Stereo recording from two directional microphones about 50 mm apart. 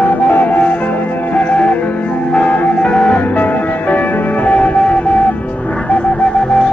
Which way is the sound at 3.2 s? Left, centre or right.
Left.